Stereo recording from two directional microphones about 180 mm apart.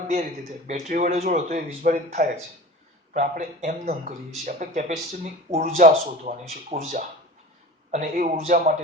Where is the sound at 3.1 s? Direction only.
45° right (ahead or behind).